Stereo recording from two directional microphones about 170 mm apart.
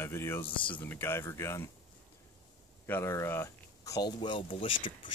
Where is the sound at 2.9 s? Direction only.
15° left (ahead or behind).